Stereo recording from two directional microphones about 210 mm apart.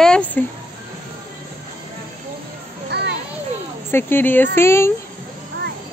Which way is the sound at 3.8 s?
10° left (ahead or behind).